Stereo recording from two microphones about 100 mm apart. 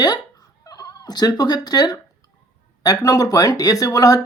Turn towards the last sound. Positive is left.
turn(degrees=35)  # may be behind; listen again after turning